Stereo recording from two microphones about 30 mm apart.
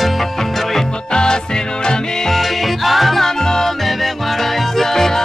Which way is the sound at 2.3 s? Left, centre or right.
Centre.